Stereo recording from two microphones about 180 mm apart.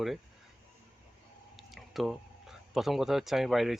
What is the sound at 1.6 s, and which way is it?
Speech, centre (ahead or behind).